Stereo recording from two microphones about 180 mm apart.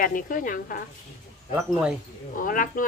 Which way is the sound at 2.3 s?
50° left (ahead or behind).